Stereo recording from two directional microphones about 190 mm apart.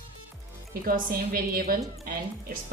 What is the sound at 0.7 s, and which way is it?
A woman's voice, 50° right (ahead or behind).